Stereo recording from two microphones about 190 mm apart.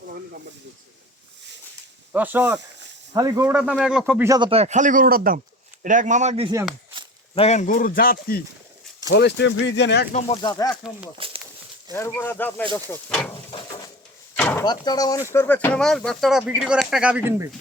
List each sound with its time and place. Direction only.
2.1 s speech: 10° right (ahead or behind)
4.3 s speech: 25° right (ahead or behind)
7.3 s a man's voice: 35° left (ahead or behind)
9.0 s speech: 65° left (ahead or behind)
10.1 s speech: 30° left (ahead or behind)
11.2 s walk: 30° right (ahead or behind)
11.9 s speech: 15° left (ahead or behind)
13.5 s bird: 25° left (ahead or behind)
14.3 s a sound: 10° left (ahead or behind)
14.6 s speech: 20° left (ahead or behind); by 17.5 s 10° right (ahead or behind)